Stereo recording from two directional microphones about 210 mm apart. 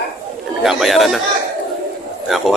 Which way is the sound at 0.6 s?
Centre (ahead or behind).